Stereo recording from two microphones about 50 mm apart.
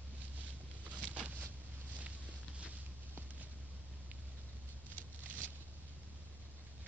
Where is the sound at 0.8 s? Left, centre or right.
Right.